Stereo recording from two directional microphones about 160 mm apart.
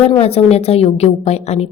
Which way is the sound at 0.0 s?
40° left (ahead or behind).